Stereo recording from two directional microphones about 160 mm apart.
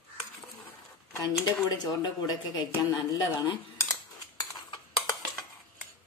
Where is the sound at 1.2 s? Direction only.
25° left (ahead or behind).